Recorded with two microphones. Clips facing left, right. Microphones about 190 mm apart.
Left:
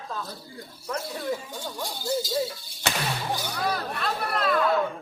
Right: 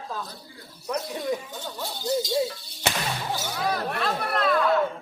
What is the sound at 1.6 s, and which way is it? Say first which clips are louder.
Speech: even; 15° left (ahead or behind).